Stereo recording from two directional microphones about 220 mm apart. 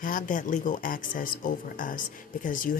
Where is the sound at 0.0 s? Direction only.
35° left (ahead or behind).